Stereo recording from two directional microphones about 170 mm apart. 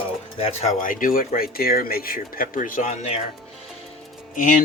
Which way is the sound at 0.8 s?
55° left (ahead or behind).